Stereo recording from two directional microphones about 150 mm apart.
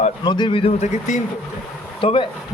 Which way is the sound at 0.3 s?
30° left (ahead or behind).